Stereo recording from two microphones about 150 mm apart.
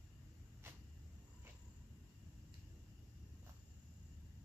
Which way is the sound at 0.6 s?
15° right (ahead or behind).